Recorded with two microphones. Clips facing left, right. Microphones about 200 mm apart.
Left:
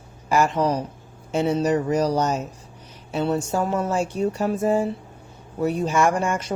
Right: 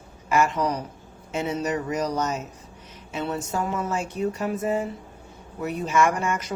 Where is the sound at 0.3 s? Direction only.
35° left (ahead or behind).